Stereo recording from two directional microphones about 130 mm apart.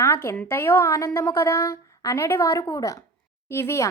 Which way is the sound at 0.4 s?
20° left (ahead or behind).